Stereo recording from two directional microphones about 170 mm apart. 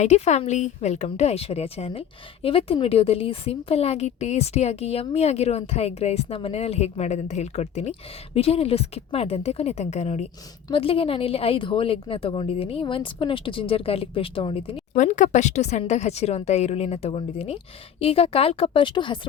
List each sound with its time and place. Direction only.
0.0 s a woman's voice: 40° left (ahead or behind)
14.9 s a woman's voice: 45° left (ahead or behind); by 19.3 s 30° left (ahead or behind)